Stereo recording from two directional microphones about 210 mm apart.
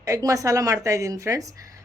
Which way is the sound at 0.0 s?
15° right (ahead or behind).